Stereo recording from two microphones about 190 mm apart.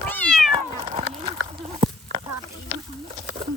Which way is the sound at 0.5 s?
30° right (ahead or behind).